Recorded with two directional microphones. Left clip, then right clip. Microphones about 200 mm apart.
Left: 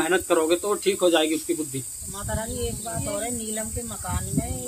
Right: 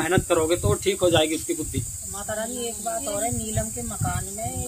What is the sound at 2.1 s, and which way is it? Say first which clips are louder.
Speech: right 1 dB; 20° left (ahead or behind).